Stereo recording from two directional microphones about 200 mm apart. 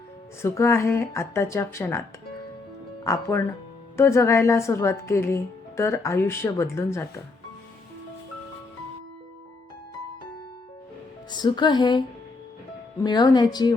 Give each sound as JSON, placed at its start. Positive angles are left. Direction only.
{"t": 0.4, "sound": "speech", "side_deg": 15}
{"t": 11.3, "sound": "speech", "side_deg": 20}